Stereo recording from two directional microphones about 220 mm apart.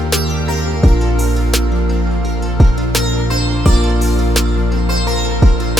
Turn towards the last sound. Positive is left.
turn(degrees=0)  # may be behind; listen again after turning